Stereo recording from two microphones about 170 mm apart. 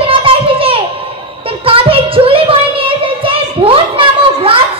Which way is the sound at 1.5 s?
35° right (ahead or behind).